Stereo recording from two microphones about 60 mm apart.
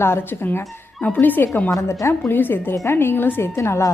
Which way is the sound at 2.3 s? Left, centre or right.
Left.